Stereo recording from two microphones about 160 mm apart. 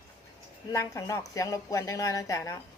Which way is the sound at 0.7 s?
20° left (ahead or behind).